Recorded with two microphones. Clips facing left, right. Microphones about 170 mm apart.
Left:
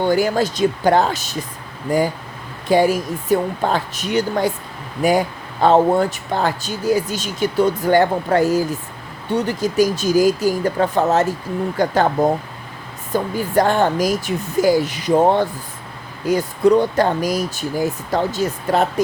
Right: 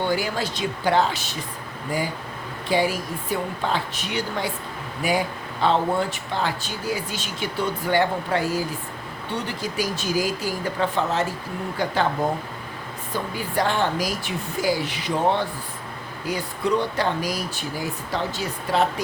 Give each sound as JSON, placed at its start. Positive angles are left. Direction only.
{"t": 0.0, "sound": "speech", "side_deg": 45}
{"t": 2.6, "sound": "speech", "side_deg": 45}
{"t": 13.1, "sound": "speech", "side_deg": 45}